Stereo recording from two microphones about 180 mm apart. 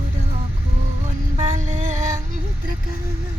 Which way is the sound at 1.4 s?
35° right (ahead or behind).